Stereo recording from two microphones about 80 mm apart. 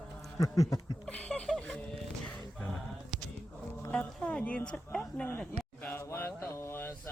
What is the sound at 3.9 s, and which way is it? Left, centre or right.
Oink, centre.